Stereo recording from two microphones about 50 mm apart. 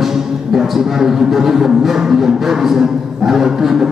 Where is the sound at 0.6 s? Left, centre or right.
Centre.